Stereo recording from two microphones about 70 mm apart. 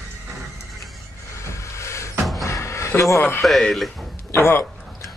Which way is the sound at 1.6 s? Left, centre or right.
Left.